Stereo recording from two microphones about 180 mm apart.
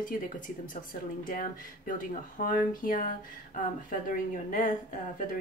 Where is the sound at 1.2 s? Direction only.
45° left (ahead or behind).